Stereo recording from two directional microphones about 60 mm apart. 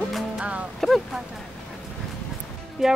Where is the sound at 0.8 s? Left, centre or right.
Centre.